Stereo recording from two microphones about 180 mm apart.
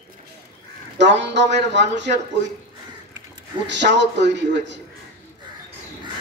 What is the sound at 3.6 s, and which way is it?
Speech, 75° right (ahead or behind).